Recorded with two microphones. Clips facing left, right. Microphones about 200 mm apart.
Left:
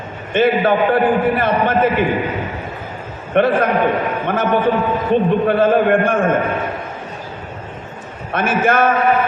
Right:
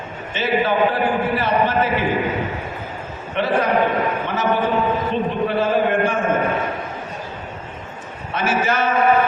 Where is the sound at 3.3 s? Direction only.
55° left (ahead or behind).